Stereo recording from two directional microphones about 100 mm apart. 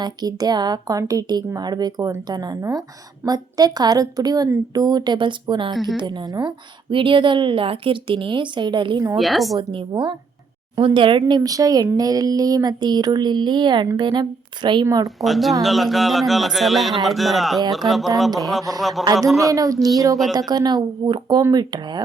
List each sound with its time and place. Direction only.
0.0 s a woman's voice: 40° right (ahead or behind)
6.9 s a woman's voice: 60° right (ahead or behind)
9.1 s speech: centre (ahead or behind)
9.6 s a woman's voice: 55° right (ahead or behind)
15.0 s speech: centre (ahead or behind)
19.5 s a woman's voice: 35° right (ahead or behind)